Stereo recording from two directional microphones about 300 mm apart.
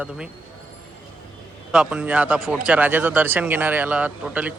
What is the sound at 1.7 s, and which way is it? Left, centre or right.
Speech, centre.